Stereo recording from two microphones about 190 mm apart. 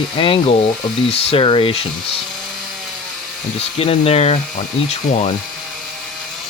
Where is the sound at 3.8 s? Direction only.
30° left (ahead or behind).